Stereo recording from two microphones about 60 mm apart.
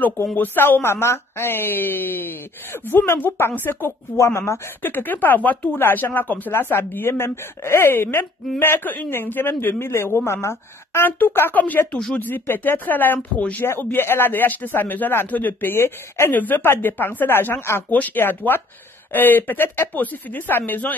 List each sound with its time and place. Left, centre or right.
0.4 s speech: left
4.2 s speech: left
11.1 s speech: left
16.3 s speech: left